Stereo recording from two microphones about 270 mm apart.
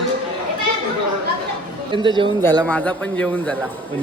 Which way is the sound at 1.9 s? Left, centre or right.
Centre.